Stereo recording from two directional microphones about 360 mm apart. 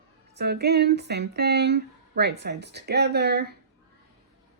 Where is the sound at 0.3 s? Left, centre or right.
Right.